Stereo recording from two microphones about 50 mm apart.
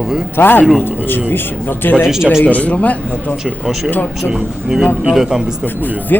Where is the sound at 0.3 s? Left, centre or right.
Left.